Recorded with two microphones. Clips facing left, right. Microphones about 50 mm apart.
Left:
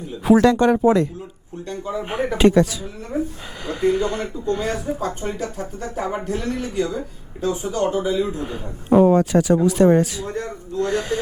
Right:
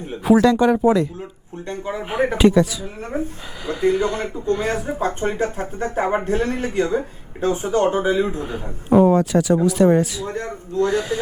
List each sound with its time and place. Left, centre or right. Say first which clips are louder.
0.3 s speech: even; centre
1.6 s speech: even; right
2.4 s speech: even; centre
3.1 s speech: left 1 dB; right
3.7 s speech: right 1 dB; centre
4.9 s speech: right 3 dB; right
8.9 s speech: even; centre
10.2 s speech: right 1 dB; right
10.8 s speech: right 1 dB; centre